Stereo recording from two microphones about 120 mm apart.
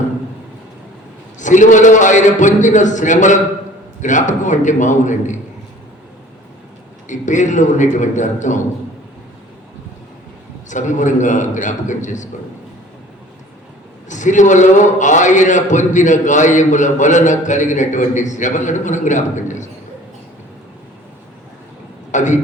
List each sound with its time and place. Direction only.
1.4 s a man's voice: 90° left
7.1 s a man's voice: 90° left
10.7 s a man's voice: 90° left
14.1 s a man's voice: 90° left
22.1 s speech: 90° left